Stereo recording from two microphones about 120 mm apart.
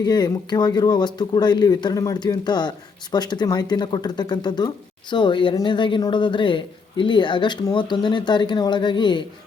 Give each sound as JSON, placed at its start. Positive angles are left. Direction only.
{"t": 0.0, "sound": "speech", "side_deg": 35}